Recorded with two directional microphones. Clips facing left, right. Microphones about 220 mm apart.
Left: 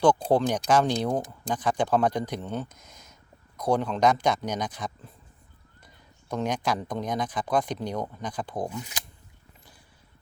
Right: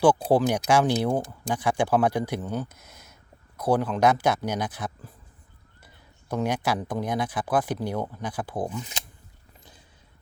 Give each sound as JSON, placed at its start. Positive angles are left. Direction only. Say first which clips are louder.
{"t": 0.0, "sound": "speech", "louder": "right 2 dB", "side_deg": -5}
{"t": 6.2, "sound": "speech", "louder": "right 2 dB", "side_deg": -5}